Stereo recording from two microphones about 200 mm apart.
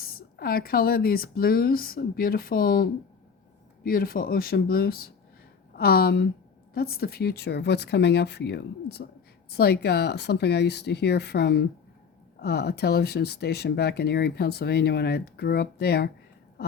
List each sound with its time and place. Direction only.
0.0 s speech: 50° left (ahead or behind)